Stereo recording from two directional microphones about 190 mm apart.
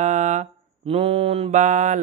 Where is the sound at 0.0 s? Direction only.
40° right (ahead or behind).